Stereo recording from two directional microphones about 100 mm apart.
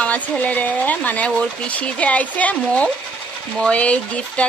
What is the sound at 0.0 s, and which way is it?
A woman's voice, 15° left (ahead or behind).